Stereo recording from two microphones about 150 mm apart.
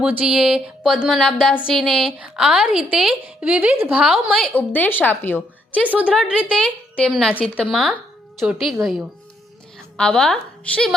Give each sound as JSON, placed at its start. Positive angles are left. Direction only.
{"t": 0.0, "sound": "a woman's voice", "side_deg": -5}
{"t": 5.8, "sound": "a woman's voice", "side_deg": -10}
{"t": 6.6, "sound": "a woman's voice", "side_deg": 5}